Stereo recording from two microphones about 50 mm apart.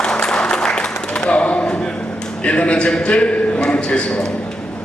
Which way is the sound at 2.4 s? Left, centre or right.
Left.